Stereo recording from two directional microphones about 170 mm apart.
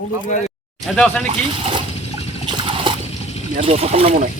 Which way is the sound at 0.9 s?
10° left (ahead or behind).